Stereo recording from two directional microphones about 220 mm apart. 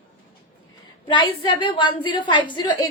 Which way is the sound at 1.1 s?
20° left (ahead or behind).